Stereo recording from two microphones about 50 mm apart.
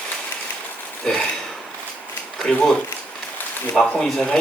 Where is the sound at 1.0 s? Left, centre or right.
Centre.